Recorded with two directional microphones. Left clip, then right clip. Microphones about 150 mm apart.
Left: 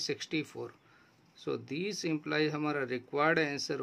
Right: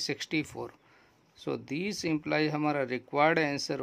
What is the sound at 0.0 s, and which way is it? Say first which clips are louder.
Speech: right 3 dB; 35° right (ahead or behind).